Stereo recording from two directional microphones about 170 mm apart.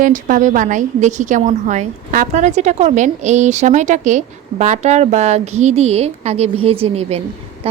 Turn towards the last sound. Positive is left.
turn(degrees=-35)  # may be behind; listen again after turning